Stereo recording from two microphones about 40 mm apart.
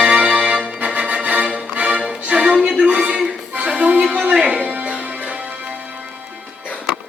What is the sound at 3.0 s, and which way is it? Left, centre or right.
Music, centre.